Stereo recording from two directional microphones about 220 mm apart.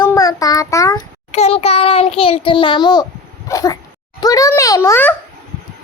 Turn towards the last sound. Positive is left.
turn(degrees=10)  # may be behind; listen again after turning